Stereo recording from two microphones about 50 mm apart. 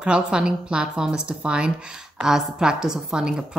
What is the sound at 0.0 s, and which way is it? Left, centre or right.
A woman's voice, centre.